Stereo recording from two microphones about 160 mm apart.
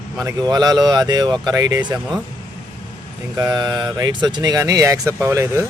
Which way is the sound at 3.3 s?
25° right (ahead or behind).